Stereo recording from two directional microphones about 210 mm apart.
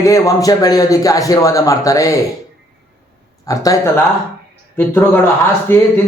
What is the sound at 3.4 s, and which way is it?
A man's voice, 15° left (ahead or behind).